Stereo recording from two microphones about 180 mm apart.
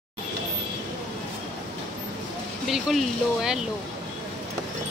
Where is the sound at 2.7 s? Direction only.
Centre (ahead or behind).